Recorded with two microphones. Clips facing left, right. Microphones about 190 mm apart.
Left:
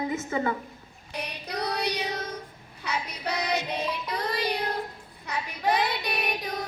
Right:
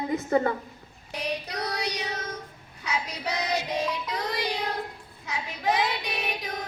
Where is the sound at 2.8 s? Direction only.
60° left (ahead or behind).